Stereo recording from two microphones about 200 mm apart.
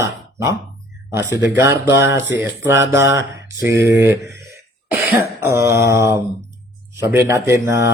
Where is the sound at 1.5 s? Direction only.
15° right (ahead or behind).